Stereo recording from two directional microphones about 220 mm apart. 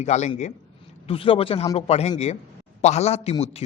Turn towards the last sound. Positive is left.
turn(degrees=30)  # may be behind; listen again after turning